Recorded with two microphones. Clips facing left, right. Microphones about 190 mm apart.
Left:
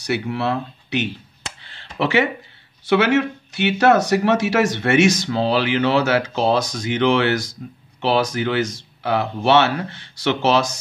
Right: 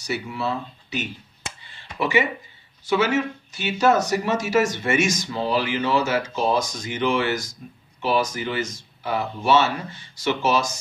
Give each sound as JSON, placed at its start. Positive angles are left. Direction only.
{"t": 0.0, "sound": "speech", "side_deg": 70}
{"t": 1.6, "sound": "a sound", "side_deg": 80}
{"t": 2.8, "sound": "speech", "side_deg": 70}